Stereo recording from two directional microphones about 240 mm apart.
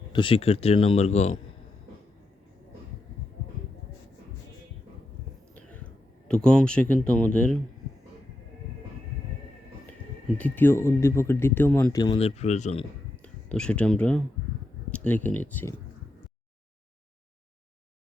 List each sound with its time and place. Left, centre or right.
0.1 s speech: left
6.2 s speech: centre
10.3 s speech: centre; by 12.8 s left
13.2 s speech: centre